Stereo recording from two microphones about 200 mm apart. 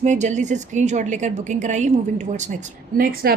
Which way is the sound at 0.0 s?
35° right (ahead or behind).